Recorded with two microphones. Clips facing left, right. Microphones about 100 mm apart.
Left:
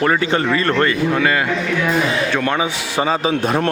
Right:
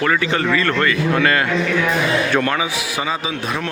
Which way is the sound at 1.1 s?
15° left (ahead or behind).